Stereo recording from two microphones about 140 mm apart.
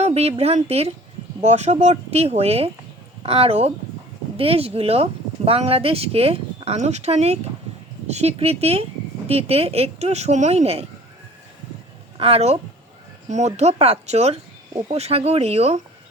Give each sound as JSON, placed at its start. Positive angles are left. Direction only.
{"t": 0.0, "sound": "speech", "side_deg": -50}
{"t": 12.1, "sound": "a woman's voice", "side_deg": -45}